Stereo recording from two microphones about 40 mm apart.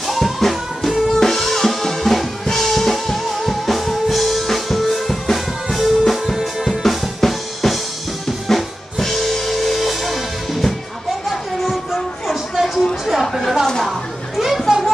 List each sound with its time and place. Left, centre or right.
0.0 s music: centre
6.8 s drum: centre
8.5 s drum kit: centre
11.7 s music: centre
13.0 s a sound: centre
13.8 s children playing: centre